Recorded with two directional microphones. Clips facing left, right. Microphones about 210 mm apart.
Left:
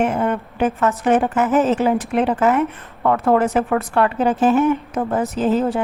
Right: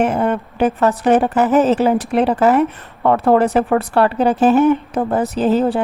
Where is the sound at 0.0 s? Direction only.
35° right (ahead or behind).